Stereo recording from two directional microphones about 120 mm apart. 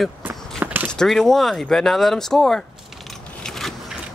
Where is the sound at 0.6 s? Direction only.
15° right (ahead or behind).